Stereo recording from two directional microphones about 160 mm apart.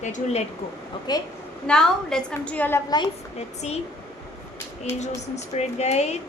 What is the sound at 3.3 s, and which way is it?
Speech, 40° left (ahead or behind).